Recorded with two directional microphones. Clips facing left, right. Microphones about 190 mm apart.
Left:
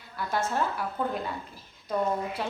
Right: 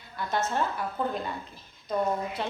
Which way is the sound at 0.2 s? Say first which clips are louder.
Even; 10° left (ahead or behind).